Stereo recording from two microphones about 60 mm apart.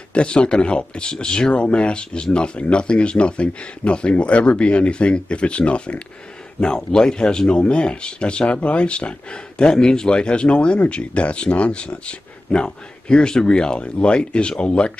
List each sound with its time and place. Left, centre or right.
0.1 s speech: centre